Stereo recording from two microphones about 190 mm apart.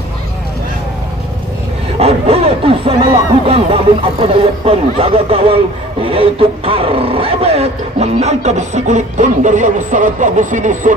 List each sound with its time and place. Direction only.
2.0 s speech: 30° right (ahead or behind)